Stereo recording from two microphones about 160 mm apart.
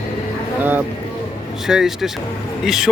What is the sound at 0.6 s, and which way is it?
A man's voice, 10° right (ahead or behind).